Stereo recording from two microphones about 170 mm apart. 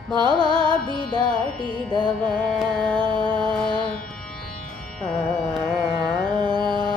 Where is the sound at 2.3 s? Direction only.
5° left (ahead or behind).